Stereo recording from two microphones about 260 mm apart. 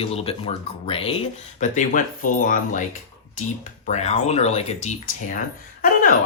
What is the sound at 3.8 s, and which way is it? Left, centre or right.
Speech, left.